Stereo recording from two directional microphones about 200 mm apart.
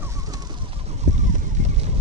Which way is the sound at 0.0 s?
15° right (ahead or behind).